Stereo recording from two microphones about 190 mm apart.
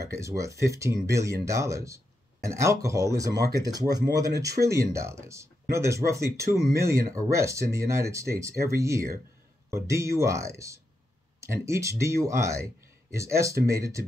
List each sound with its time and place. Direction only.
0.0 s speech: 15° right (ahead or behind)